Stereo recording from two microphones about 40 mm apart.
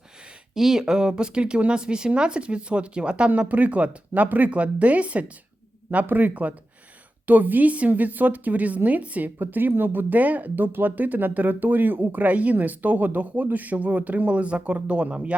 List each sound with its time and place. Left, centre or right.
0.5 s speech: centre; by 5.2 s right
6.1 s speech: right
9.4 s speech: right
14.3 s speech: right